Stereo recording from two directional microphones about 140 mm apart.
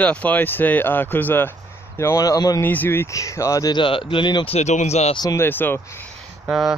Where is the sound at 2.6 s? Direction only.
15° left (ahead or behind); by 4.4 s 35° left (ahead or behind).